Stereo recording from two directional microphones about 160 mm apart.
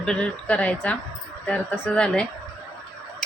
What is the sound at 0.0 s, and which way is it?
Speech, 5° left (ahead or behind).